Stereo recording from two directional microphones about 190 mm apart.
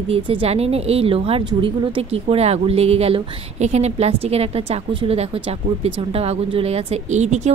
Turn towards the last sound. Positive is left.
turn(degrees=-35)  # may be behind; listen again after turning